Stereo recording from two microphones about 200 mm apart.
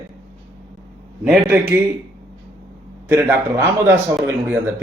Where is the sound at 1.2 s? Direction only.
10° right (ahead or behind).